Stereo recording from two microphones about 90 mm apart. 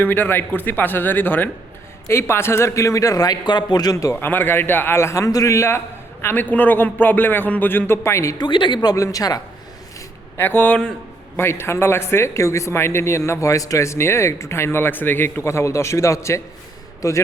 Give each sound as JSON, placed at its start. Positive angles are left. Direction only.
{"t": 0.0, "sound": "speech", "side_deg": 20}
{"t": 3.9, "sound": "speech", "side_deg": 30}
{"t": 6.2, "sound": "speech", "side_deg": 20}
{"t": 8.4, "sound": "speech", "side_deg": 65}
{"t": 9.0, "sound": "speech", "side_deg": 40}
{"t": 10.3, "sound": "speech", "side_deg": 25}
{"t": 11.3, "sound": "speech", "side_deg": 25}